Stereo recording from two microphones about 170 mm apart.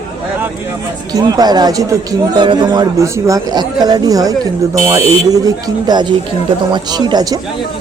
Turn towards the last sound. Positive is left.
turn(degrees=-25)  # may be behind; listen again after turning